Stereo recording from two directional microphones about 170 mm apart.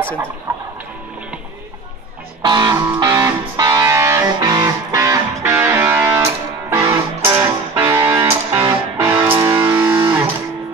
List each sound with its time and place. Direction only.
0.5 s music: 20° right (ahead or behind)
2.4 s music: 25° right (ahead or behind)